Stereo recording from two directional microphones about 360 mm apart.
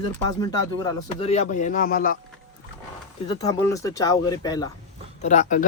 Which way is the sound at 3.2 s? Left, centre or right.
Centre.